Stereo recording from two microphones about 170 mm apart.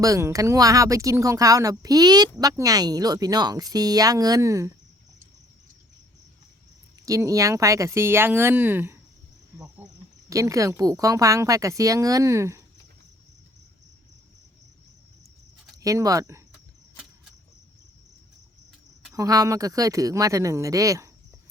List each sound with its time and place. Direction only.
0.0 s speech: 20° right (ahead or behind)
7.0 s speech: 20° right (ahead or behind)
15.8 s speech: 20° right (ahead or behind)
19.1 s speech: 20° right (ahead or behind)